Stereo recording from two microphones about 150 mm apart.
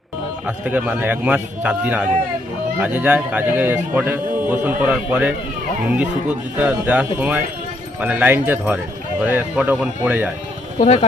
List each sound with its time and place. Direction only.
0.4 s speech: 10° right (ahead or behind)
10.8 s speech: 50° left (ahead or behind)